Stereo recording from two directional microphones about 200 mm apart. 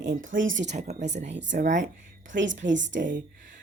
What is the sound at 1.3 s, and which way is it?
Speech, 65° right (ahead or behind).